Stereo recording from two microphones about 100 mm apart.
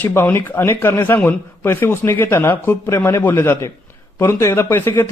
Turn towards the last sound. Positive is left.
turn(degrees=25)  # may be behind; listen again after turning